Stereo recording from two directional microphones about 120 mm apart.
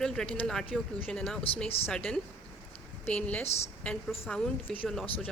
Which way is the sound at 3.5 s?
60° left (ahead or behind).